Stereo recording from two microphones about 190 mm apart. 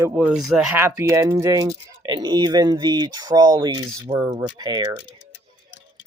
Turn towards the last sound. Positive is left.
turn(degrees=-20)  # may be behind; listen again after turning